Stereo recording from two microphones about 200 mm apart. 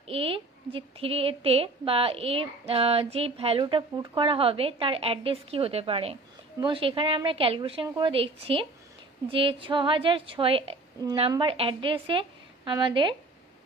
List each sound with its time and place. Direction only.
0.0 s a woman's voice: 30° right (ahead or behind)